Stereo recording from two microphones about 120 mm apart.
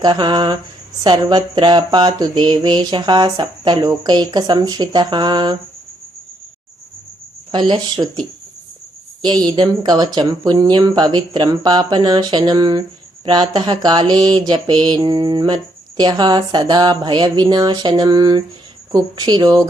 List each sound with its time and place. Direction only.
0.0 s speech: 40° right (ahead or behind)
7.5 s speech: 40° right (ahead or behind)
9.4 s speech: 35° right (ahead or behind)